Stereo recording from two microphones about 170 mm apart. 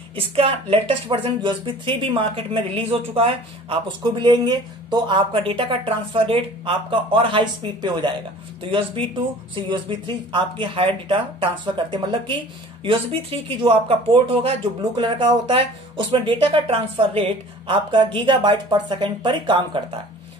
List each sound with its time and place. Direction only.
0.1 s speech: 35° right (ahead or behind)